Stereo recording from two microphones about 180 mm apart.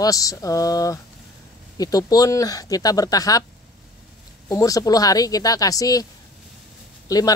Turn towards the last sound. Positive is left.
turn(degrees=20)  # may be behind; listen again after turning